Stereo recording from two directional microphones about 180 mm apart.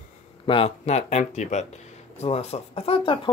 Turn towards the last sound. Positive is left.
turn(degrees=30)  # may be behind; listen again after turning